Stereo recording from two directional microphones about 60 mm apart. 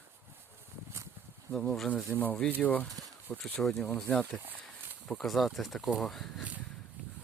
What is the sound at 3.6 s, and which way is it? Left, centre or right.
Speech, centre.